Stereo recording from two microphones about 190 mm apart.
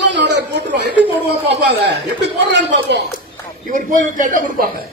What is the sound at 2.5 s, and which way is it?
Speech, 65° right (ahead or behind).